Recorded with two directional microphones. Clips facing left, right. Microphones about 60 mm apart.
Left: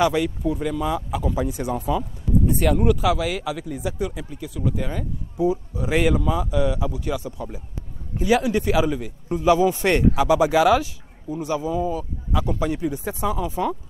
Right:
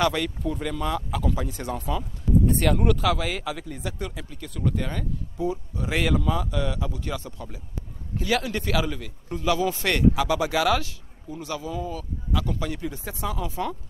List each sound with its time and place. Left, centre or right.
0.0 s a man's voice: centre